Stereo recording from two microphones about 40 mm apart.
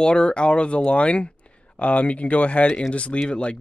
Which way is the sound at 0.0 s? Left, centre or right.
Left.